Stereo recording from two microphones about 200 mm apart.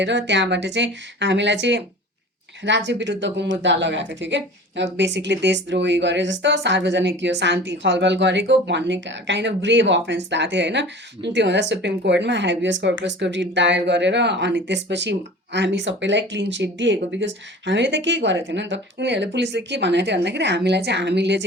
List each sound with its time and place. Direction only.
0.0 s speech: 60° right (ahead or behind)